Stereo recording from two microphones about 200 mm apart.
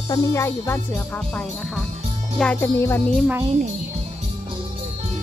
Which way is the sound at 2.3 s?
5° left (ahead or behind).